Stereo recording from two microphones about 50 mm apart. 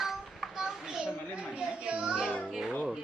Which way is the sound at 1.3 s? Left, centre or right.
Right.